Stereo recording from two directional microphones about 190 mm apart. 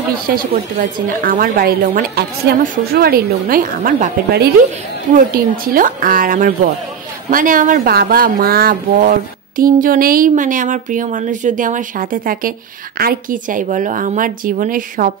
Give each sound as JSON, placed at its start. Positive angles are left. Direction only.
{"t": 0.3, "sound": "speech", "side_deg": -50}